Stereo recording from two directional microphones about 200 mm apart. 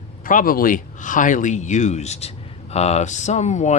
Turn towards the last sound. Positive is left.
turn(degrees=35)  # may be behind; listen again after turning